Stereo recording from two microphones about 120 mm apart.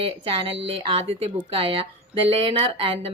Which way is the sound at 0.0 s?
50° right (ahead or behind).